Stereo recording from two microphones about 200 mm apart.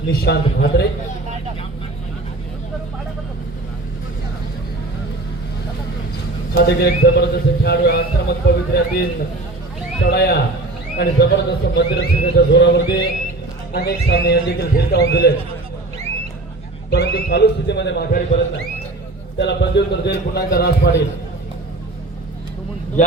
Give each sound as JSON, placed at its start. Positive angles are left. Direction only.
{"t": 0.1, "sound": "a man's voice", "side_deg": 55}
{"t": 6.6, "sound": "a man's voice", "side_deg": 55}
{"t": 10.1, "sound": "a man's voice", "side_deg": 55}
{"t": 16.9, "sound": "a man's voice", "side_deg": 55}
{"t": 19.4, "sound": "a man's voice", "side_deg": 60}